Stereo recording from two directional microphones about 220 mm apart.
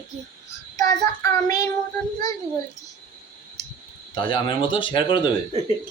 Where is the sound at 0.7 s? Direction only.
15° left (ahead or behind).